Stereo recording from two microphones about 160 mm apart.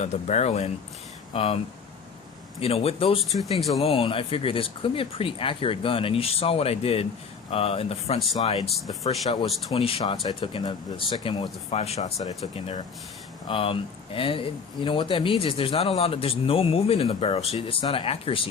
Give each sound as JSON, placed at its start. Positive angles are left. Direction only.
{"t": 0.0, "sound": "speech", "side_deg": 45}
{"t": 2.6, "sound": "speech", "side_deg": 40}
{"t": 8.6, "sound": "speech", "side_deg": 0}
{"t": 9.6, "sound": "speech", "side_deg": 40}
{"t": 13.5, "sound": "speech", "side_deg": 35}